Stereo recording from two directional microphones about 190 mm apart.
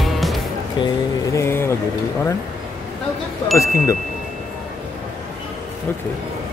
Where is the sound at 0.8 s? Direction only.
15° left (ahead or behind).